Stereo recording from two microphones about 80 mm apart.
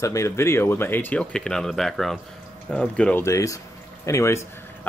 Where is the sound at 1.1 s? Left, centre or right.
Centre.